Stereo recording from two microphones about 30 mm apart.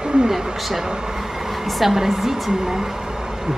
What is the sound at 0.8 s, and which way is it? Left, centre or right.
Speech, right.